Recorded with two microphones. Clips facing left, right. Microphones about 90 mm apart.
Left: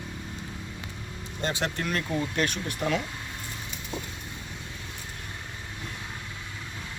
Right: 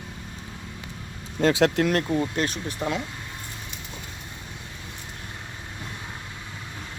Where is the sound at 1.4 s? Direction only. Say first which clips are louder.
Right 10 dB; 90° right.